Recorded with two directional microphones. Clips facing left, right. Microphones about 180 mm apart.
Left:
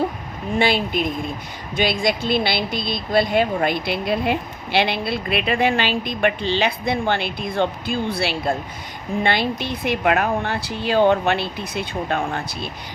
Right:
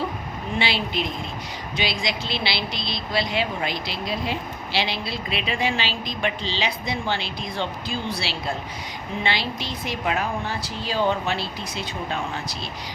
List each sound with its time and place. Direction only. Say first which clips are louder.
0.6 s speech: left 7 dB; 50° left (ahead or behind)